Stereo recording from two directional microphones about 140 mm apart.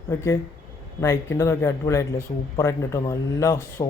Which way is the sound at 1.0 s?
20° left (ahead or behind).